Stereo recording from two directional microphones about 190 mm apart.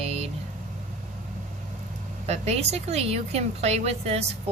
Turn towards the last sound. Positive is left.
turn(degrees=-35)  # may be behind; listen again after turning